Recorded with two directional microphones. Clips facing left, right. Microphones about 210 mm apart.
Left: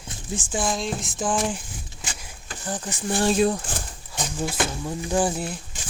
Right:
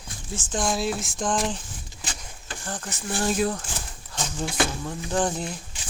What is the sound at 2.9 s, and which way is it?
Speech, 30° left (ahead or behind).